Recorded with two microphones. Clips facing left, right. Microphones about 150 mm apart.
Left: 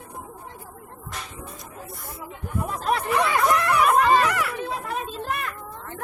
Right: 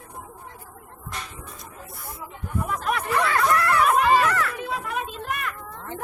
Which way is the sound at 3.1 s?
20° left (ahead or behind).